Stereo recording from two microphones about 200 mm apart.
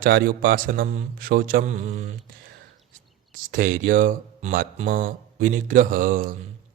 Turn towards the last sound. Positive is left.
turn(degrees=-45)  # may be behind; listen again after turning